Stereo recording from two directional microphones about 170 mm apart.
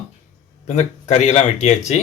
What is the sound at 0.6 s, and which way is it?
Speech, 45° left (ahead or behind).